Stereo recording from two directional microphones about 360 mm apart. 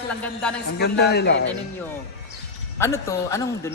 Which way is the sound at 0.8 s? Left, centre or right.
Left.